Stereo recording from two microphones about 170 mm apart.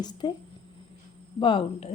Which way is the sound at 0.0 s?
25° left (ahead or behind).